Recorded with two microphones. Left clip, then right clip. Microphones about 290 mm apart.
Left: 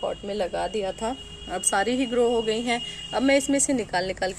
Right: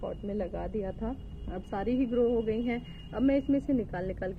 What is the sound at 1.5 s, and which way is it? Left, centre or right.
A woman's voice, centre.